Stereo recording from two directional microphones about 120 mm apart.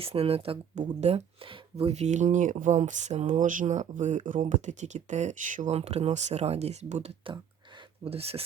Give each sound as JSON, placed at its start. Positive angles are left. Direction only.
{"t": 0.0, "sound": "speech", "side_deg": -55}
{"t": 0.8, "sound": "speech", "side_deg": -65}
{"t": 8.0, "sound": "speech", "side_deg": -55}